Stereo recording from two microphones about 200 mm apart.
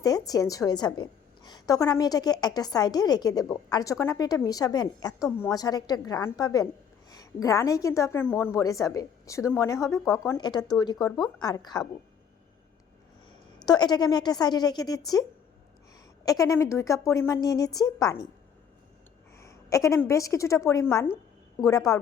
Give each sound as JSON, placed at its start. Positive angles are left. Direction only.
{"t": 0.0, "sound": "a woman's voice", "side_deg": 20}
{"t": 13.7, "sound": "a woman's voice", "side_deg": 20}
{"t": 16.2, "sound": "a woman's voice", "side_deg": 15}
{"t": 19.4, "sound": "a woman's voice", "side_deg": 15}